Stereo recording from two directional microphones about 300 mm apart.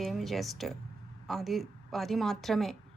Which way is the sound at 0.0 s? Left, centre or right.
Centre.